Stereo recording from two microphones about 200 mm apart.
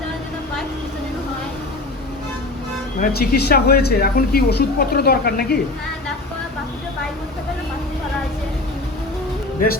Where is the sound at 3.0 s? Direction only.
50° left (ahead or behind).